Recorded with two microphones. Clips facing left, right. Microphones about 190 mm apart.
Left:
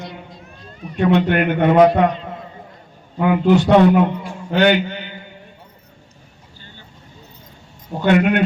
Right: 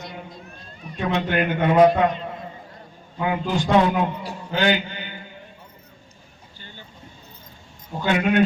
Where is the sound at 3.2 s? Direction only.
65° left (ahead or behind).